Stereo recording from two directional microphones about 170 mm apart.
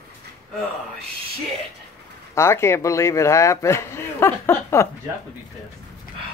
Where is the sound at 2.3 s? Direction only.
15° left (ahead or behind).